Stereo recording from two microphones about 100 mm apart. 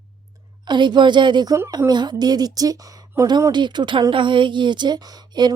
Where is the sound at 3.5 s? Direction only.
50° right (ahead or behind).